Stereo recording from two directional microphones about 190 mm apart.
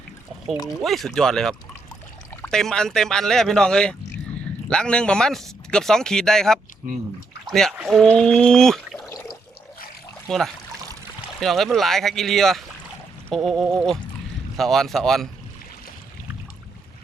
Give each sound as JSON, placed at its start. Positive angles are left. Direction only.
{"t": 0.8, "sound": "speech", "side_deg": 0}
{"t": 9.0, "sound": "water", "side_deg": 20}
{"t": 10.2, "sound": "speech", "side_deg": 0}